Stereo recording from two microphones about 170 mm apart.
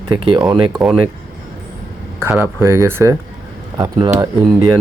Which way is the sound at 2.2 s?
15° right (ahead or behind).